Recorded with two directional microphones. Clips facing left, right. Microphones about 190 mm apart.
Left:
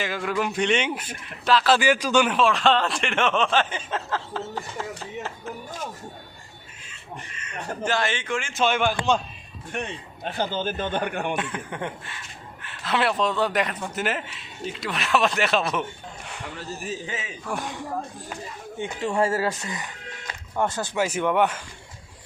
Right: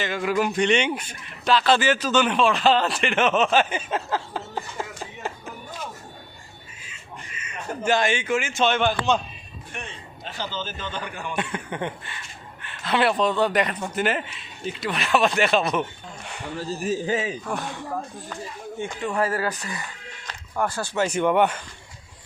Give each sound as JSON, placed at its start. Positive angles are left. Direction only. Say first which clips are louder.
{"t": 0.0, "sound": "speech", "louder": "right 3 dB", "side_deg": 0}
{"t": 2.3, "sound": "speech", "louder": "right 1 dB", "side_deg": 0}
{"t": 7.3, "sound": "a sound", "louder": "right 1 dB", "side_deg": -5}
{"t": 7.9, "sound": "speech", "louder": "right 5 dB", "side_deg": -15}
{"t": 8.6, "sound": "a man's voice", "louder": "even", "side_deg": 10}
{"t": 10.2, "sound": "a man's voice", "louder": "left 6 dB", "side_deg": 55}
{"t": 11.3, "sound": "speech", "louder": "right 2 dB", "side_deg": 0}
{"t": 16.2, "sound": "a sound", "louder": "right 2 dB", "side_deg": 0}
{"t": 16.6, "sound": "speech", "louder": "right 8 dB", "side_deg": -35}
{"t": 17.5, "sound": "a man's voice", "louder": "right 1 dB", "side_deg": 15}
{"t": 19.0, "sound": "speech", "louder": "left 2 dB", "side_deg": 25}
{"t": 21.0, "sound": "speech", "louder": "right 2 dB", "side_deg": 5}